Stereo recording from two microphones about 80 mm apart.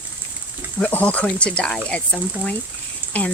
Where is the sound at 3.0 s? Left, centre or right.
Right.